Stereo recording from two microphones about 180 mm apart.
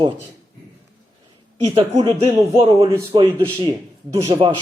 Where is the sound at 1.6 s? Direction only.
35° right (ahead or behind).